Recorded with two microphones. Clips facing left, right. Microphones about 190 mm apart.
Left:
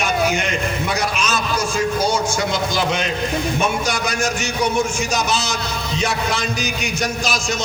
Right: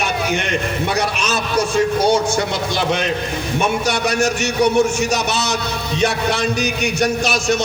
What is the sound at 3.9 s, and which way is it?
A man's voice, 65° right (ahead or behind).